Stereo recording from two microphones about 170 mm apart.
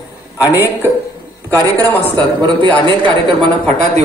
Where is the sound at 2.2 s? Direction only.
25° right (ahead or behind).